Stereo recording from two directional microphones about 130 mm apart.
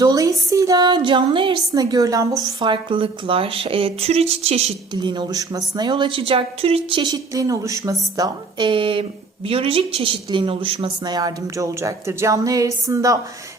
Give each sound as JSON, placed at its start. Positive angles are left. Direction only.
{"t": 0.0, "sound": "speech", "side_deg": -30}
{"t": 2.6, "sound": "speech", "side_deg": -40}
{"t": 4.9, "sound": "a woman's voice", "side_deg": -35}